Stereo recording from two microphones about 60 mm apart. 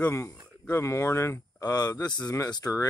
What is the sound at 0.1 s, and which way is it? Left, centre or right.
Speech, left.